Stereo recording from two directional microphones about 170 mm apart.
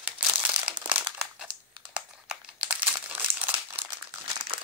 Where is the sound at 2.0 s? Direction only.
5° right (ahead or behind).